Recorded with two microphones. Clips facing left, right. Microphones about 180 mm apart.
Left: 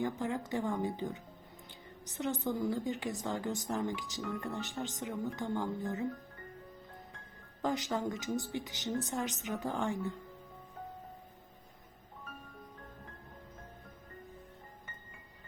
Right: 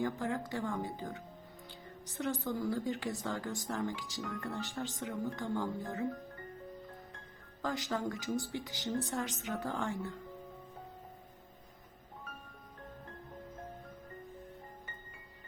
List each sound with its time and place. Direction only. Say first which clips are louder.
0.0 s speech: even; 20° left (ahead or behind)
7.6 s speech: left 2 dB; 20° left (ahead or behind)